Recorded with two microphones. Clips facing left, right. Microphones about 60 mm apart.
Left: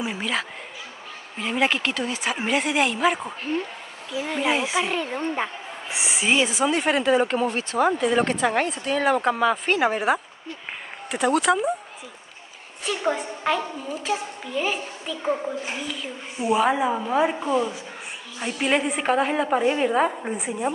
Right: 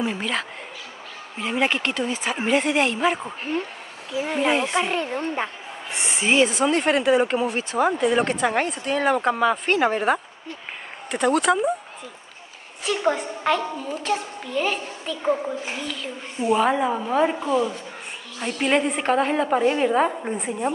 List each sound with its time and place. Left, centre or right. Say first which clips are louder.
0.0 s speech: right 1 dB; centre
4.1 s speech: right 2 dB; right
4.4 s speech: right 2 dB; centre
12.8 s speech: right 2 dB; centre